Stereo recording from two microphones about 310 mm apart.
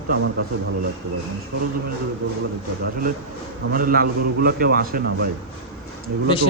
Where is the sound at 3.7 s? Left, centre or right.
Right.